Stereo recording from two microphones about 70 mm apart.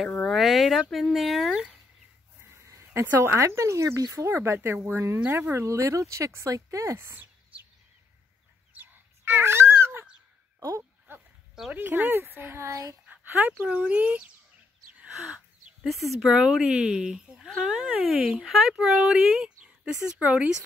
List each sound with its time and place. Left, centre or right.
0.0 s a sound: centre
1.0 s speech: centre
2.4 s speech: right
4.3 s speech: right
8.7 s a sound: right
11.1 s goat: right
11.7 s speech: right
12.6 s speech: right
13.0 s speech: right
15.0 s a sound: centre
16.1 s speech: centre